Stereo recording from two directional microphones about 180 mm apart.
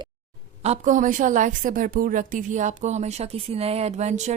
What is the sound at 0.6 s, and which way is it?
A woman's voice, 40° right (ahead or behind).